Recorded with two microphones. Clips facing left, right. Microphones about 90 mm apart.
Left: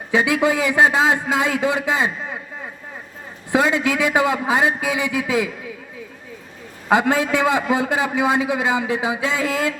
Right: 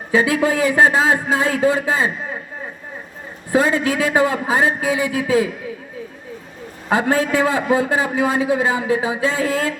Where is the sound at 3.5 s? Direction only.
40° right (ahead or behind).